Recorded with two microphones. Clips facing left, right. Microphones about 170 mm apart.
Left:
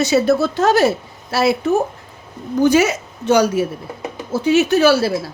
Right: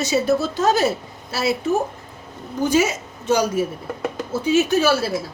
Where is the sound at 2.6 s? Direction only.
75° left (ahead or behind).